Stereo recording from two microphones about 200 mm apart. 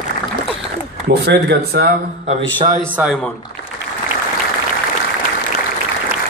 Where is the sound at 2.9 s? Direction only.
5° right (ahead or behind).